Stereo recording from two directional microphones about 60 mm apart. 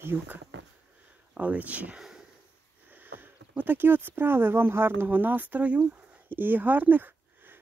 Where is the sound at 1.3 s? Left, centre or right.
Right.